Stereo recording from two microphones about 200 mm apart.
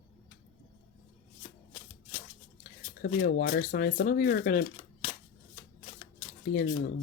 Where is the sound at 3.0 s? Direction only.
45° left (ahead or behind).